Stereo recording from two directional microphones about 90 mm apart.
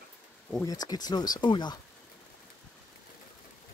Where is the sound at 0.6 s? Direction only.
45° left (ahead or behind).